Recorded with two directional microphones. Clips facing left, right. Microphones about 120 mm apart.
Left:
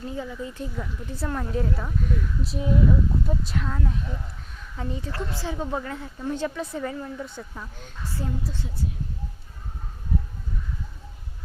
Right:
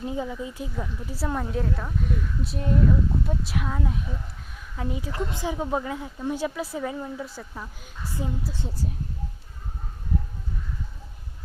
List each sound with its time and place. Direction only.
0.0 s speech: 20° right (ahead or behind)
0.6 s speech: 5° right (ahead or behind)
8.5 s speech: 5° right (ahead or behind)